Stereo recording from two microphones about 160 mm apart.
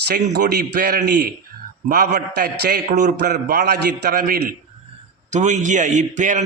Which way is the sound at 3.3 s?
85° right.